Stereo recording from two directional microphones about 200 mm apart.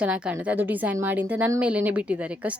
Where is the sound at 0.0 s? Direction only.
5° right (ahead or behind).